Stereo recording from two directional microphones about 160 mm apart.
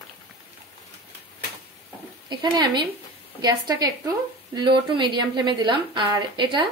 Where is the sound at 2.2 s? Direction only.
25° right (ahead or behind).